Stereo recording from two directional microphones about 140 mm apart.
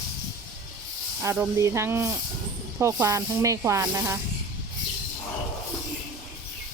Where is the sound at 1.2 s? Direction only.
15° right (ahead or behind).